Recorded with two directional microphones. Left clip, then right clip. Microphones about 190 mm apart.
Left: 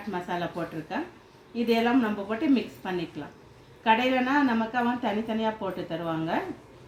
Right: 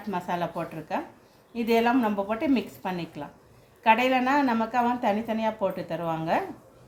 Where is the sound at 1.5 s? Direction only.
45° right (ahead or behind).